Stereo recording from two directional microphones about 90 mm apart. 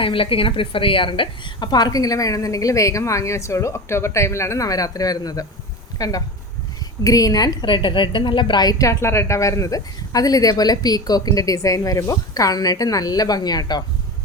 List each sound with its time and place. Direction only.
0.0 s a woman's voice: 85° left; by 8.7 s 60° left (ahead or behind)
8.8 s a woman's voice: 30° left (ahead or behind); by 13.8 s 50° left (ahead or behind)